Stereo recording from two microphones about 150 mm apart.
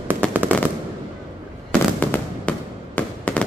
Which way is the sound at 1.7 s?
10° left (ahead or behind).